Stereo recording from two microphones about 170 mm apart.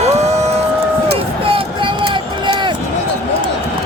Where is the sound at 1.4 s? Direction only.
30° right (ahead or behind).